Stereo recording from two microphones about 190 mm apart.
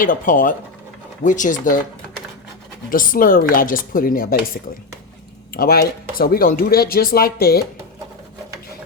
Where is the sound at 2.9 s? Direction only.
45° left (ahead or behind).